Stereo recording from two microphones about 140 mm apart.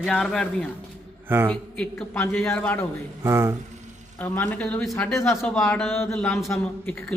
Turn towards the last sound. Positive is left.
turn(degrees=0)  # may be behind; listen again after turning